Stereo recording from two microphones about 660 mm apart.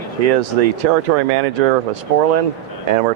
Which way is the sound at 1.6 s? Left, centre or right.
Right.